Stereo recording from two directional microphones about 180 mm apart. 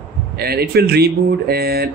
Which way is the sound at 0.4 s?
60° right (ahead or behind).